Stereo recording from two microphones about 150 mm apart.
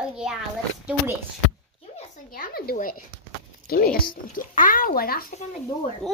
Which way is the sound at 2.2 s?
70° left (ahead or behind).